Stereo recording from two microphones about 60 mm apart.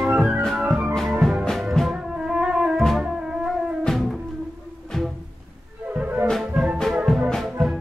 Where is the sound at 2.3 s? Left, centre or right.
Centre.